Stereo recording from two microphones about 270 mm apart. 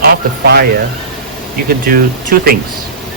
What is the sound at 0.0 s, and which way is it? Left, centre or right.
Speech, right.